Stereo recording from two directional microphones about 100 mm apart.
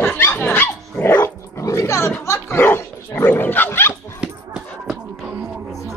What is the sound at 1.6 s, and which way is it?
Dog, 30° left (ahead or behind).